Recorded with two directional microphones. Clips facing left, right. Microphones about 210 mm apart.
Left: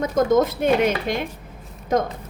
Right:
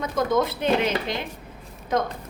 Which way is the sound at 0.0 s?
45° left (ahead or behind).